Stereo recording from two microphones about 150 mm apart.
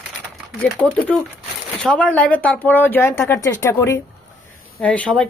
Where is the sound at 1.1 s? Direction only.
5° left (ahead or behind).